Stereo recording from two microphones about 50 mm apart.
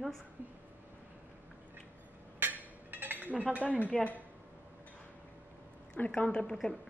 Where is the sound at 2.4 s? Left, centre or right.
Right.